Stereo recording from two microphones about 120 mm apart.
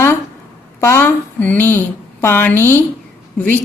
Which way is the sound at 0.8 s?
20° left (ahead or behind).